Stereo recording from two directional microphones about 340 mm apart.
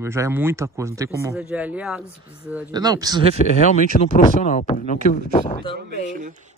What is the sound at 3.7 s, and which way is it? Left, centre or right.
Speech, left.